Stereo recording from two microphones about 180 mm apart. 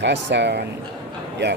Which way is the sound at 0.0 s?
75° right (ahead or behind).